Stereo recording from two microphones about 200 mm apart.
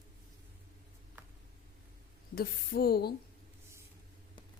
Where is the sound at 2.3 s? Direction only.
50° left (ahead or behind).